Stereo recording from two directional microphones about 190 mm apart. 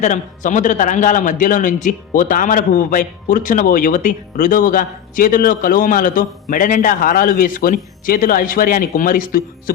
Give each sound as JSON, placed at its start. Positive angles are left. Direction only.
{"t": 0.0, "sound": "a man's voice", "side_deg": 40}